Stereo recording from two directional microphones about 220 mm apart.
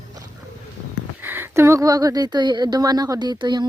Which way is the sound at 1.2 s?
10° right (ahead or behind).